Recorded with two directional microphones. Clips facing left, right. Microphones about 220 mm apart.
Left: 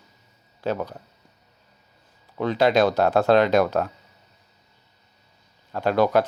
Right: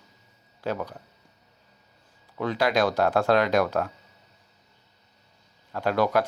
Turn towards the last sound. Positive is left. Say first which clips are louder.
# left 4 dB
turn(degrees=25)  # may be behind; listen again after turning